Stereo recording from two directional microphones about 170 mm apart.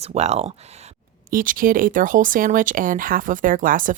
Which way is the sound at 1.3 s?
55° right (ahead or behind).